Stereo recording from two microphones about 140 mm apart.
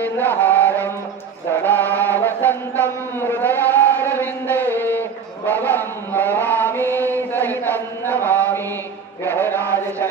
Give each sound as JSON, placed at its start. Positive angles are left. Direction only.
{"t": 0.0, "sound": "mantra", "side_deg": 15}
{"t": 1.6, "sound": "chant", "side_deg": 15}
{"t": 7.3, "sound": "a sound", "side_deg": 15}
{"t": 9.2, "sound": "mantra", "side_deg": 15}